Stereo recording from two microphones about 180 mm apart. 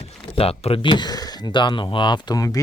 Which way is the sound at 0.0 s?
35° left (ahead or behind).